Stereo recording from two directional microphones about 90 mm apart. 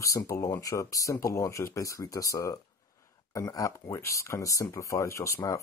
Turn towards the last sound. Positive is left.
turn(degrees=35)  # may be behind; listen again after turning